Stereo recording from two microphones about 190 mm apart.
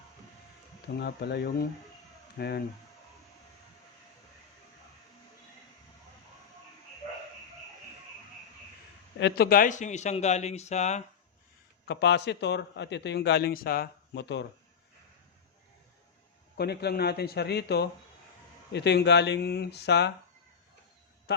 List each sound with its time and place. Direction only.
0.9 s a man's voice: 60° left (ahead or behind)
9.1 s a man's voice: 60° left (ahead or behind); by 11.0 s 35° left (ahead or behind)
11.9 s a man's voice: 65° left (ahead or behind)
16.6 s a man's voice: 55° left (ahead or behind)
21.3 s a man's voice: 60° left (ahead or behind)